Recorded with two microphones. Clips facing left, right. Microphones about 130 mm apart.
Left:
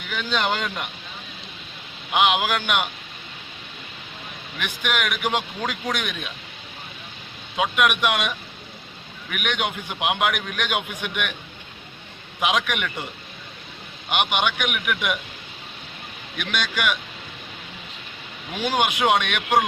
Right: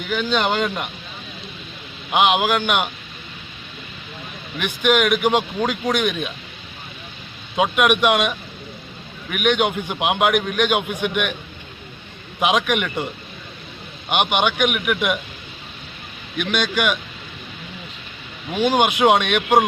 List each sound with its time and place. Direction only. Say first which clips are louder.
0.1 s a man's voice: right 4 dB; 20° right (ahead or behind)
2.1 s a man's voice: right 3 dB; 20° right (ahead or behind)
4.6 s a man's voice: right 8 dB; 20° right (ahead or behind)
7.5 s a man's voice: right 4 dB; 25° right (ahead or behind)
12.4 s a man's voice: right 4 dB; 25° right (ahead or behind)
14.1 s a man's voice: right 4 dB; 25° right (ahead or behind)
16.4 s a man's voice: right 5 dB; 20° right (ahead or behind)
18.5 s a man's voice: right 5 dB; 25° right (ahead or behind)